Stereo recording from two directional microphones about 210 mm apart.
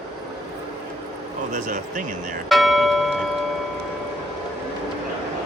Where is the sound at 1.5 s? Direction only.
35° right (ahead or behind).